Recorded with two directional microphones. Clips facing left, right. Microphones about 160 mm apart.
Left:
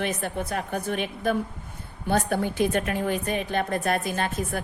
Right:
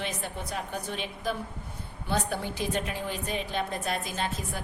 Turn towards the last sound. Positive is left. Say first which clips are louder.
# left 5 dB
turn(degrees=55)  # may be behind; listen again after turning